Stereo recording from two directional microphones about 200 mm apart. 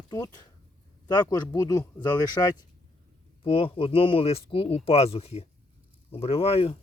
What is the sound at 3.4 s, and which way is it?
Speech, 25° left (ahead or behind).